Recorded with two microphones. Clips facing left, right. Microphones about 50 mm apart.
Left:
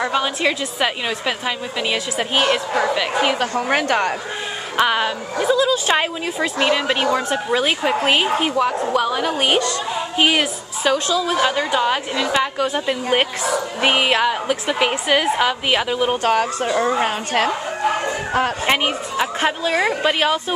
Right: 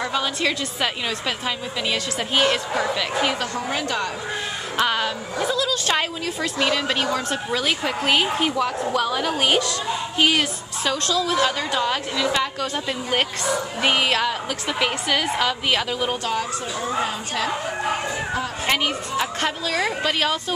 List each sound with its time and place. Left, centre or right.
0.0 s a woman's voice: centre
3.3 s speech: left
4.7 s a woman's voice: left
16.2 s speech: left
18.0 s a sound: left
18.7 s a woman's voice: left